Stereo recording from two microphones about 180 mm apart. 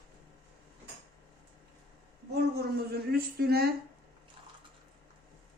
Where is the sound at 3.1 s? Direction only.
60° right (ahead or behind).